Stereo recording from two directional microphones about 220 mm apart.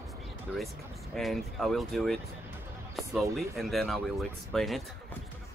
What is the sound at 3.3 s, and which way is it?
Speech, centre (ahead or behind).